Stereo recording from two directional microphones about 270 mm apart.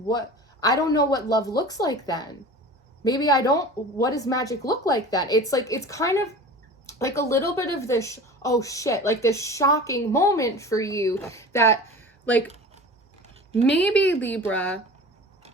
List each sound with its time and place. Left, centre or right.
0.1 s speech: centre
13.7 s speech: centre